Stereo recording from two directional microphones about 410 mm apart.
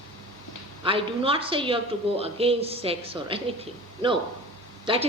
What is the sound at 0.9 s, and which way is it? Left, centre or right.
Speech, centre.